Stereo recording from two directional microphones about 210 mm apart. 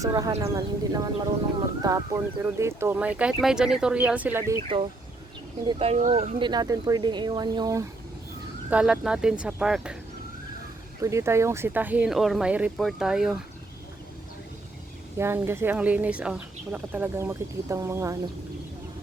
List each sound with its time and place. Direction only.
0.0 s speech: 15° right (ahead or behind)
5.6 s speech: 30° right (ahead or behind)
6.4 s speech: 20° right (ahead or behind)
8.7 s speech: 5° right (ahead or behind)
11.0 s speech: 15° right (ahead or behind)
15.2 s speech: 10° right (ahead or behind)